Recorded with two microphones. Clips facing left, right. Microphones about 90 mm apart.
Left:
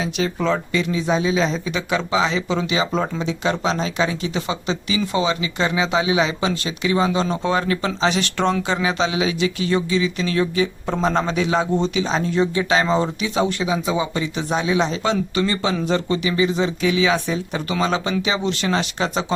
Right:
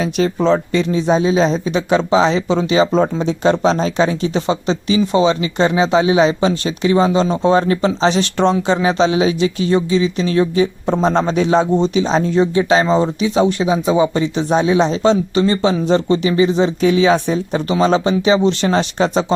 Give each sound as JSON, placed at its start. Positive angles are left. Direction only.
{"t": 0.3, "sound": "speech", "side_deg": -30}